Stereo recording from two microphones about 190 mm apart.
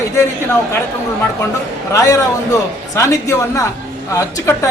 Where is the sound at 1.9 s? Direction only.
15° left (ahead or behind).